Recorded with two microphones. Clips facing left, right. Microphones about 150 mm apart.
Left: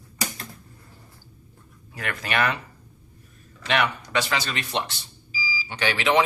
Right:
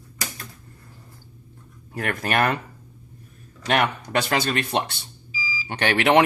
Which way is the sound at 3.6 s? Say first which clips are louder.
Right 2 dB; 45° right (ahead or behind).